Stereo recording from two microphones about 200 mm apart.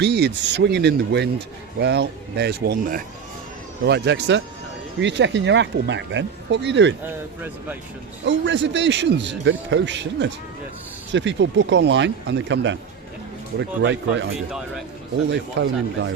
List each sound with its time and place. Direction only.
0.0 s a man's voice: 55° right (ahead or behind)
3.8 s a man's voice: 60° right (ahead or behind)
7.0 s speech: 10° right (ahead or behind)
8.2 s a man's voice: 65° right (ahead or behind)
15.3 s a man's voice: 60° right (ahead or behind)